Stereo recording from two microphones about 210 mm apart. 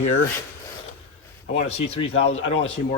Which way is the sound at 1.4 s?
30° left (ahead or behind).